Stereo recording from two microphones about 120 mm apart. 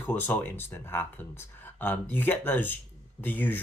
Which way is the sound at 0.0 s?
15° left (ahead or behind).